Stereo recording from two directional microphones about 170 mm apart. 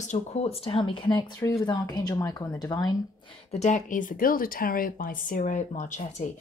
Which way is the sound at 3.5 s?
45° left (ahead or behind).